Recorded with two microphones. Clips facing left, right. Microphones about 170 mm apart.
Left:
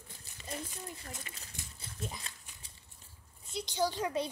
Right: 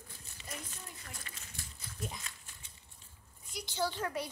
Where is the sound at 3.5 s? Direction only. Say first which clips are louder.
Left 5 dB; 25° left (ahead or behind).